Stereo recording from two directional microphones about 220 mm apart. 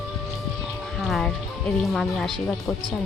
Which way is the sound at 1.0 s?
Centre (ahead or behind).